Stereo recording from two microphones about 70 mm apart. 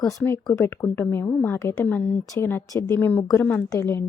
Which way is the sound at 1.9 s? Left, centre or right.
Left.